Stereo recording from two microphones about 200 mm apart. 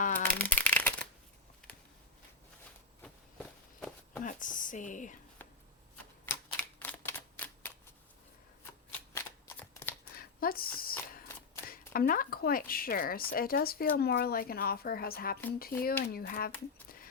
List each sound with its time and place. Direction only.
0.2 s shuffling cards: 10° left (ahead or behind)
3.0 s walk: 5° left (ahead or behind)
4.2 s a sound: 40° left (ahead or behind)
5.4 s chopping: 10° left (ahead or behind)
6.2 s typewriter: 10° left (ahead or behind)
8.9 s shuffling cards: 10° left (ahead or behind)
10.2 s a sound: 45° left (ahead or behind)
11.7 s speech: 45° left (ahead or behind)